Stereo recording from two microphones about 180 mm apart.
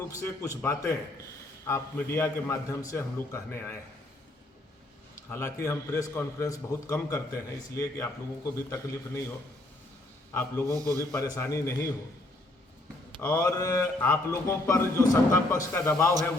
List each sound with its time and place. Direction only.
0.1 s a man's voice: 15° left (ahead or behind)
5.3 s a man's voice: 15° left (ahead or behind)
10.3 s a man's voice: 15° left (ahead or behind)
10.8 s a man's voice: 20° right (ahead or behind)
11.1 s a man's voice: 15° left (ahead or behind)
13.2 s a man's voice: 15° left (ahead or behind)